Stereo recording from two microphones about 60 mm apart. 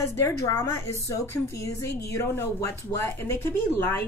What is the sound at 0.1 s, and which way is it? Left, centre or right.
A woman's voice, left.